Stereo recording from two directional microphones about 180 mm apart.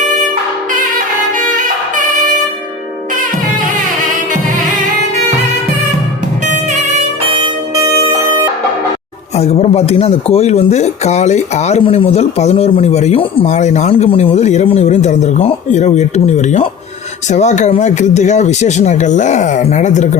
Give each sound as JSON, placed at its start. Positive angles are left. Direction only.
{"t": 1.4, "sound": "music", "side_deg": -45}
{"t": 6.4, "sound": "music", "side_deg": -40}
{"t": 9.3, "sound": "speech", "side_deg": 35}